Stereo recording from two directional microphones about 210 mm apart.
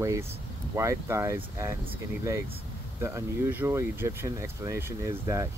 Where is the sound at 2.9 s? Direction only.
15° right (ahead or behind).